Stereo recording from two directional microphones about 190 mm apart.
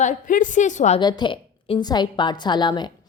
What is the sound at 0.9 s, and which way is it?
A woman's voice, 25° left (ahead or behind).